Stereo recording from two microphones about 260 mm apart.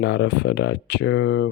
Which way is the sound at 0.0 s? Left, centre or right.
Left.